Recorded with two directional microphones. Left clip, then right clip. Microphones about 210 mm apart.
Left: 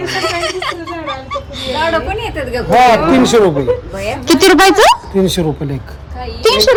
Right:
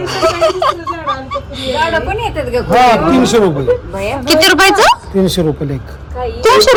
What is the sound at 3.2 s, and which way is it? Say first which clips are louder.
Speech: left 1 dB; 45° left (ahead or behind).